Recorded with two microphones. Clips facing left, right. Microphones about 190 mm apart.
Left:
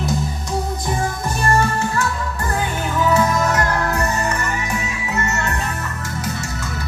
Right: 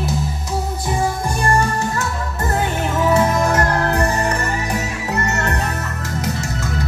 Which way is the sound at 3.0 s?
30° right (ahead or behind).